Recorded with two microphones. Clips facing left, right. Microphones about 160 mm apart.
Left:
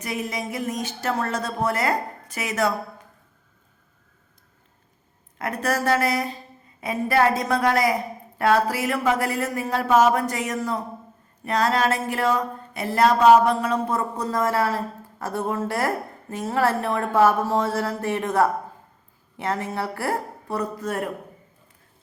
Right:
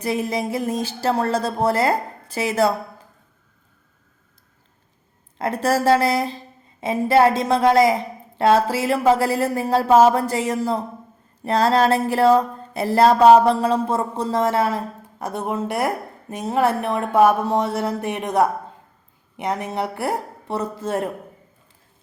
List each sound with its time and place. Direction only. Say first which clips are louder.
0.0 s speech: right 6 dB; 30° right (ahead or behind)
5.4 s a woman's voice: right 5 dB; 30° right (ahead or behind)